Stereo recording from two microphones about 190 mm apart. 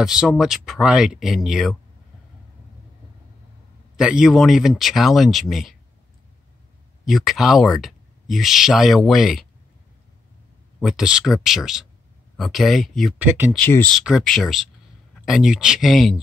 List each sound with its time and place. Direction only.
0.0 s speech: 5° right (ahead or behind)
3.9 s speech: 5° right (ahead or behind)
7.1 s speech: centre (ahead or behind)
10.8 s speech: centre (ahead or behind)
13.2 s speech: 10° right (ahead or behind)
13.5 s speech: 10° left (ahead or behind)
13.9 s speech: centre (ahead or behind)